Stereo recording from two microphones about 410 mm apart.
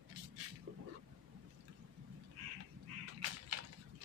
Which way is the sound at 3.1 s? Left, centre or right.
Right.